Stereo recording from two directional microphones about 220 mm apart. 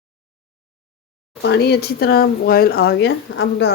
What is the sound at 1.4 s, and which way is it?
Speech, 45° left (ahead or behind).